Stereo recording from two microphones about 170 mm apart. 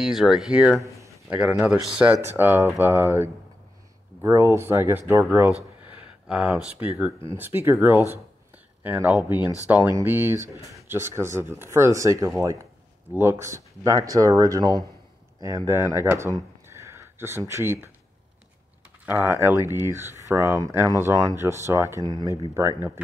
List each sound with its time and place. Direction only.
0.0 s speech: centre (ahead or behind)
0.7 s a sound: 20° right (ahead or behind)
1.3 s speech: 10° right (ahead or behind)
6.2 s speech: 5° right (ahead or behind)
16.6 s a sound: 15° right (ahead or behind)
19.0 s speech: 10° right (ahead or behind)